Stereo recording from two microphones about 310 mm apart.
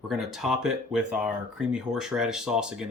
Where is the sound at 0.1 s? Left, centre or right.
Centre.